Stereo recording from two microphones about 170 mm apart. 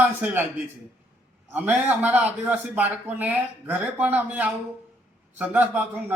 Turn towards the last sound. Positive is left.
turn(degrees=-10)  # may be behind; listen again after turning